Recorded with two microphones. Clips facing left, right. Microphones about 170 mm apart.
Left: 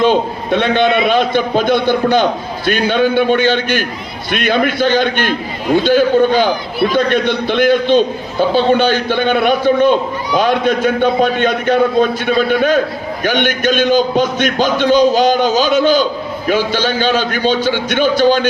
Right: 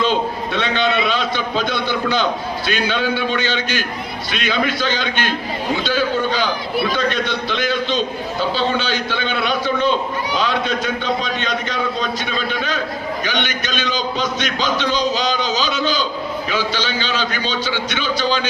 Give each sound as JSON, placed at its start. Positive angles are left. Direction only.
{"t": 0.0, "sound": "a man's voice", "side_deg": 55}